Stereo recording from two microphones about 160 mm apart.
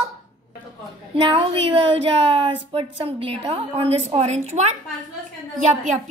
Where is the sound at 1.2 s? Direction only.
35° right (ahead or behind); by 6.0 s 50° right (ahead or behind).